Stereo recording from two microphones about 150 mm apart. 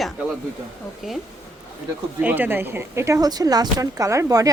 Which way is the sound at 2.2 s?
10° right (ahead or behind).